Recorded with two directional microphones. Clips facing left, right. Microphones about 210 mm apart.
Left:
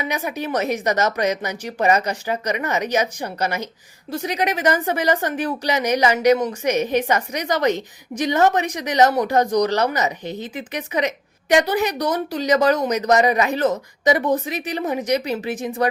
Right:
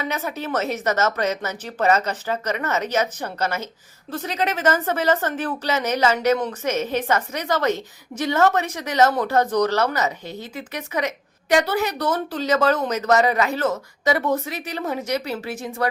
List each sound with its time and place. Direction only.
0.0 s a woman's voice: 15° left (ahead or behind)